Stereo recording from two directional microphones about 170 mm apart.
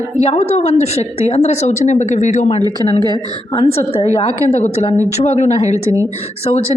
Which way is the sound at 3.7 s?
35° left (ahead or behind).